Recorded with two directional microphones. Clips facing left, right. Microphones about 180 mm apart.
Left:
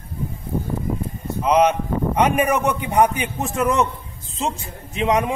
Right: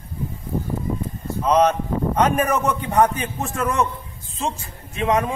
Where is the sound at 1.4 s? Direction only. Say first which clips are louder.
Left 1 dB; 10° left (ahead or behind).